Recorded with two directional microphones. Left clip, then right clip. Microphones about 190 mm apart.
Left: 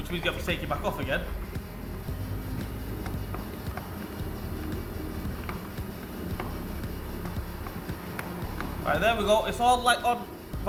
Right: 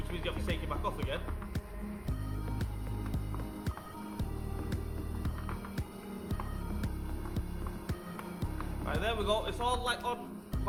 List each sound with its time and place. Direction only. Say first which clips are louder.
0.1 s speech: left 9 dB; 15° right (ahead or behind)
8.9 s a man's voice: left 9 dB; 20° right (ahead or behind)